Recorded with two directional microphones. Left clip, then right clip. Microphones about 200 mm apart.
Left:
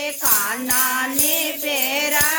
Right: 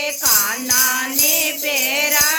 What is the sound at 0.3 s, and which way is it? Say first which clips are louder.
Music: right 2 dB; 35° left (ahead or behind).